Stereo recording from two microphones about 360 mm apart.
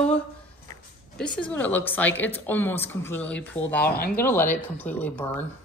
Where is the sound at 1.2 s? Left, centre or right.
Centre.